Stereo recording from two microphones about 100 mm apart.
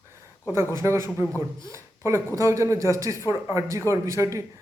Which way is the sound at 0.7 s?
30° right (ahead or behind).